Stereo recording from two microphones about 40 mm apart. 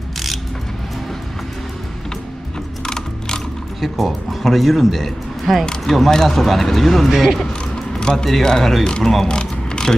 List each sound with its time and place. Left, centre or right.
3.8 s speech: centre
8.0 s a man's voice: centre
9.3 s a sound: left